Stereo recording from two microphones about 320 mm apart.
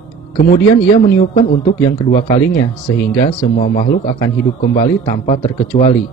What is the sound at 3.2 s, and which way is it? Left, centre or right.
Speech, left.